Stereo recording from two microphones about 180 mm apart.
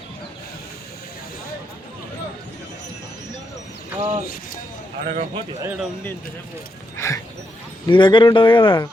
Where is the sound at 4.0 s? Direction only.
35° right (ahead or behind).